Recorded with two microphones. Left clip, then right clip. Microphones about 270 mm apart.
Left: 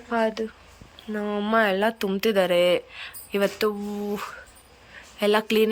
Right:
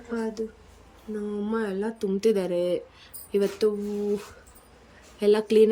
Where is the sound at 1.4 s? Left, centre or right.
Centre.